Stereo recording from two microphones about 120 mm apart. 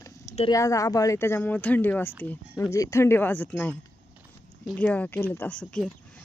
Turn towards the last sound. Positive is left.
turn(degrees=10)  # may be behind; listen again after turning